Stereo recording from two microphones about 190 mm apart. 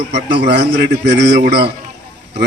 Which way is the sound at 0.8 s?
60° right (ahead or behind).